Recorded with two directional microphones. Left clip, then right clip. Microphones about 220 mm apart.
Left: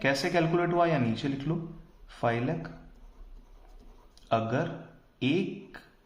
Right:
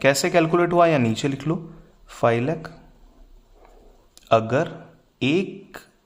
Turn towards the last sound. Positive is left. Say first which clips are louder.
# right 7 dB
turn(degrees=-45)  # may be behind; listen again after turning